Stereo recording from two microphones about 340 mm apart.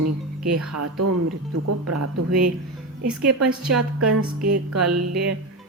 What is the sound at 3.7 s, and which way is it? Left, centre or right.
Speech, right.